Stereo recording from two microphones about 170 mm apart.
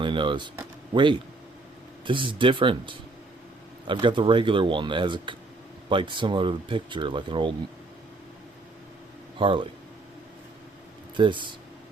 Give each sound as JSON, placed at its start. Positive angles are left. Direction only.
{"t": 0.0, "sound": "speech", "side_deg": -30}
{"t": 9.4, "sound": "speech", "side_deg": -30}
{"t": 11.2, "sound": "speech", "side_deg": -30}